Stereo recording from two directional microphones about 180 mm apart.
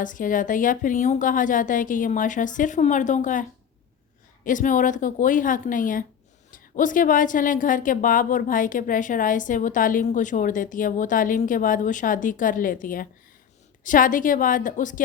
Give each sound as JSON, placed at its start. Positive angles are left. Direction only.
{"t": 0.0, "sound": "a woman's voice", "side_deg": 45}
{"t": 4.4, "sound": "a woman's voice", "side_deg": 45}